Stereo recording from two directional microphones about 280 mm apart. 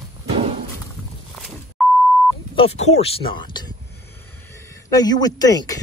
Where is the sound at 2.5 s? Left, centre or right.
Left.